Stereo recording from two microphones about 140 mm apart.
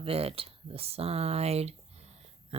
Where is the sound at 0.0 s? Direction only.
45° right (ahead or behind).